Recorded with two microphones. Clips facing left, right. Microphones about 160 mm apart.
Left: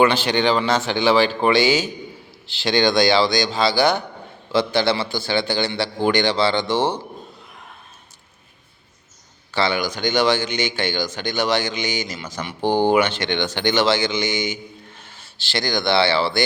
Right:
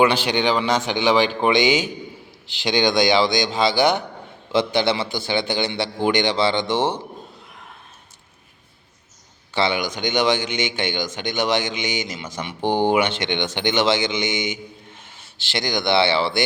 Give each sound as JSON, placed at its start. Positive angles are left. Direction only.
{"t": 0.0, "sound": "speech", "side_deg": -10}
{"t": 9.6, "sound": "speech", "side_deg": -20}